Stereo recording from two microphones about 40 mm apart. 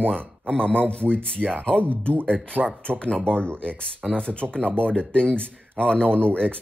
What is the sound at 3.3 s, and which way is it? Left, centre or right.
Speech, right.